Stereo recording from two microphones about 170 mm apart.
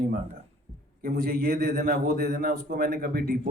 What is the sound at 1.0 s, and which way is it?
A man's voice, 65° right (ahead or behind).